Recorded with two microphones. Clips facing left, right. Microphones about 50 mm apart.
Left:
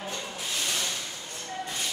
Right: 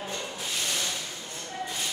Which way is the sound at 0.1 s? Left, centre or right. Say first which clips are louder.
Even; centre.